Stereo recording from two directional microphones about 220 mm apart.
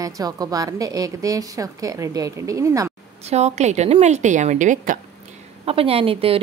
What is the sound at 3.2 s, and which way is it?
A woman's voice, 30° right (ahead or behind).